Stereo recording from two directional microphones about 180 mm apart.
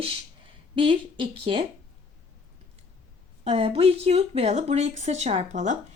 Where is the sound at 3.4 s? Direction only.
35° right (ahead or behind).